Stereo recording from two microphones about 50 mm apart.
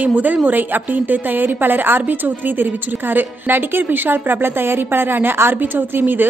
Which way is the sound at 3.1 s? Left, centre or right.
Right.